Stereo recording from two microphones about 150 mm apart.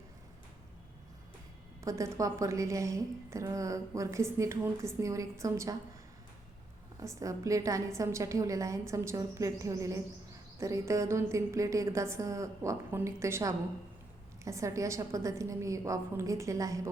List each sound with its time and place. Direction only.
1.8 s a woman's voice: 20° right (ahead or behind)
7.2 s a woman's voice: 20° right (ahead or behind)